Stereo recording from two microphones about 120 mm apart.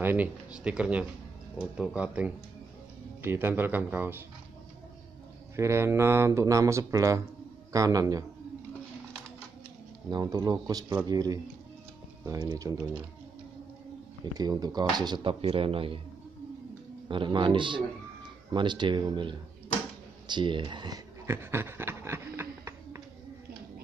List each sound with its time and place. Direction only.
0.0 s speech: 15° right (ahead or behind)
5.6 s speech: 20° right (ahead or behind)
10.0 s speech: 35° right (ahead or behind)
14.2 s speech: 30° right (ahead or behind)
15.4 s a man's voice: 50° right (ahead or behind)
17.1 s a man's voice: 45° right (ahead or behind)
21.3 s a sound: 20° right (ahead or behind)